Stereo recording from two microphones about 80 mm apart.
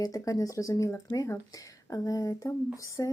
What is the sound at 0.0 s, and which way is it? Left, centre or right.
Speech, left.